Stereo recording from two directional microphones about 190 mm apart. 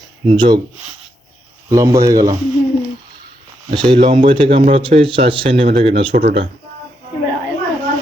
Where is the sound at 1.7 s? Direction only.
15° right (ahead or behind).